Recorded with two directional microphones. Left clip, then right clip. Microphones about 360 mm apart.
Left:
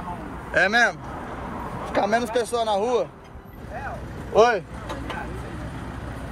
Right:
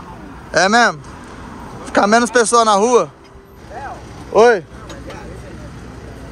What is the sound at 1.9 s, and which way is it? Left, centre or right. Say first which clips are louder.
Speech: right 10 dB; right.